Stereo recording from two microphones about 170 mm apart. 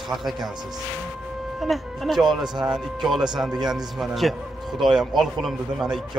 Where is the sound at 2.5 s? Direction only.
25° right (ahead or behind).